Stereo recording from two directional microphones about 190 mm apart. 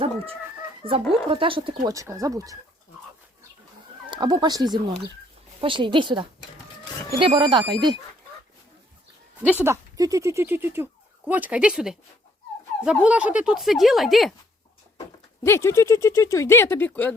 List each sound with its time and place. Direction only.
0.8 s speech: 30° right (ahead or behind)
4.1 s speech: 20° right (ahead or behind)
9.4 s speech: 10° right (ahead or behind)
15.4 s speech: 15° left (ahead or behind)